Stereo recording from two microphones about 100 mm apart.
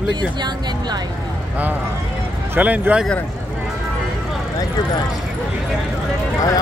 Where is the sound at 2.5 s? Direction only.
15° right (ahead or behind).